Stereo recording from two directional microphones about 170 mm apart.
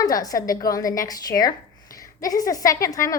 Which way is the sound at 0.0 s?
20° left (ahead or behind).